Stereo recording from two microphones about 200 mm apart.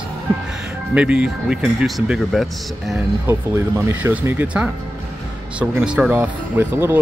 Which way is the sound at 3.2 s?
15° right (ahead or behind).